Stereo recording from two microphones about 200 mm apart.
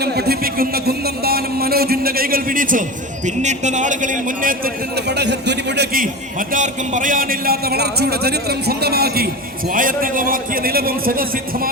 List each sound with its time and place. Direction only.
0.0 s a man's voice: 55° right (ahead or behind)
6.5 s a man's voice: 40° right (ahead or behind)